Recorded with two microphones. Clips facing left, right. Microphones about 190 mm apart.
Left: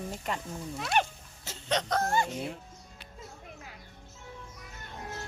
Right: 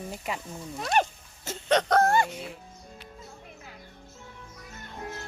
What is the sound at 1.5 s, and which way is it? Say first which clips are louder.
Chicken: right 7 dB; 60° right (ahead or behind).